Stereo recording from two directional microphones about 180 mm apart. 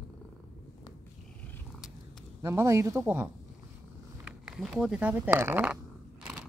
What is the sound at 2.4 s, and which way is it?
Speech, 15° right (ahead or behind).